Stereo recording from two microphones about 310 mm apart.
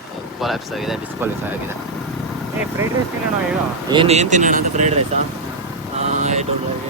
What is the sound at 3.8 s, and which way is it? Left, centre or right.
Speech, centre.